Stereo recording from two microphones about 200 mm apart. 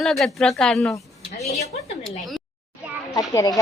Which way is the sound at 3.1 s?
20° left (ahead or behind).